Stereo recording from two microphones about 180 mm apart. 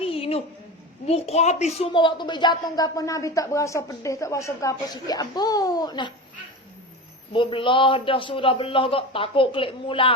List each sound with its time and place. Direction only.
0.0 s a sound: 30° left (ahead or behind)
1.0 s a woman's voice: 35° left (ahead or behind)
7.3 s a woman's voice: 30° left (ahead or behind)